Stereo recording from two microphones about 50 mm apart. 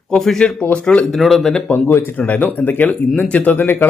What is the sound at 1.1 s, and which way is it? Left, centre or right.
Speech, centre.